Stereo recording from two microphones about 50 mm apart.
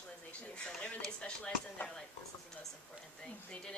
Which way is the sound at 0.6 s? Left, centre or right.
Centre.